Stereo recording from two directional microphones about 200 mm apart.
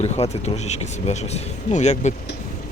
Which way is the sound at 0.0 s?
35° left (ahead or behind).